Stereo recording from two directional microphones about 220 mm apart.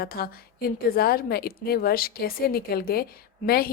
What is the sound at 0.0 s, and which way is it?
Speech, 45° left (ahead or behind).